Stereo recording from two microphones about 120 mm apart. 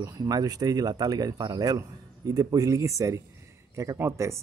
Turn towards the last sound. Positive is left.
turn(degrees=-25)  # may be behind; listen again after turning